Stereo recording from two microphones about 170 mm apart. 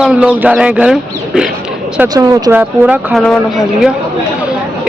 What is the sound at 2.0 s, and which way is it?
Speech, 25° right (ahead or behind).